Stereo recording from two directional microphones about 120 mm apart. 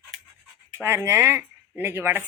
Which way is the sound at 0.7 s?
20° right (ahead or behind).